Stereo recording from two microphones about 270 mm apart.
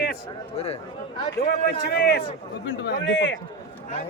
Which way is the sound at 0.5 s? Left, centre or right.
Left.